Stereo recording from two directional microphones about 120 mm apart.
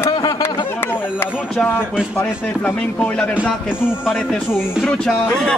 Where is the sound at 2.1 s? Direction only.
15° left (ahead or behind).